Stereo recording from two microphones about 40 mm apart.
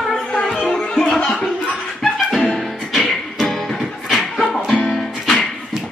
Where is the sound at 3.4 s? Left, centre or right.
Centre.